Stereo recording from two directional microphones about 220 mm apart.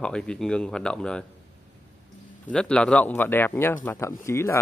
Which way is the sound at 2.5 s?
5° left (ahead or behind).